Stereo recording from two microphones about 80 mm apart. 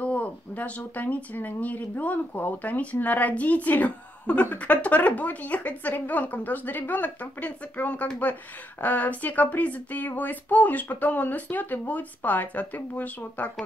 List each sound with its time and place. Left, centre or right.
0.0 s speech: centre